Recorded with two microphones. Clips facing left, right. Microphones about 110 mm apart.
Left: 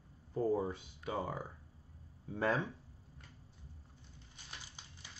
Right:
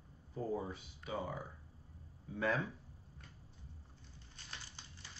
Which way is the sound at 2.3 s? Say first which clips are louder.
Left 2 dB; 35° left (ahead or behind).